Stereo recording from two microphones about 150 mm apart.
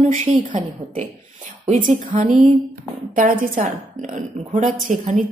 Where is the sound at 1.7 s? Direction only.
60° right (ahead or behind).